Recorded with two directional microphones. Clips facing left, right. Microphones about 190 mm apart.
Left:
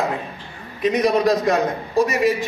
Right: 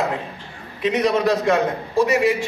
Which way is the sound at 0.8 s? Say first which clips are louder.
Left 1 dB; 40° left (ahead or behind).